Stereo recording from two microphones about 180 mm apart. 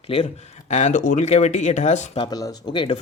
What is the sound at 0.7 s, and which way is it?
Speech, 40° left (ahead or behind).